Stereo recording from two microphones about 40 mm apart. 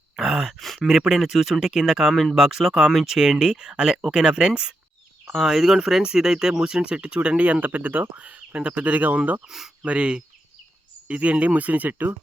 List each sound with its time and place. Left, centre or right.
0.2 s a sound: centre
0.8 s speech: centre; by 7.7 s right
7.7 s speech: right
8.1 s speech: right
8.8 s speech: right
9.5 s speech: centre
9.8 s speech: right